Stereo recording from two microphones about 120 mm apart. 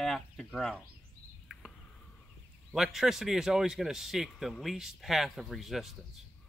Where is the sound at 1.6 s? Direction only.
10° right (ahead or behind).